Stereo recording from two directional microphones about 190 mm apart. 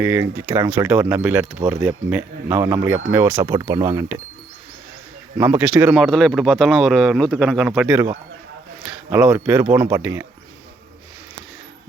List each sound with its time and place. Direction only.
0.0 s speech: 10° right (ahead or behind)
3.4 s speech: 20° right (ahead or behind)
5.4 s speech: 10° right (ahead or behind)
5.9 s speech: centre (ahead or behind)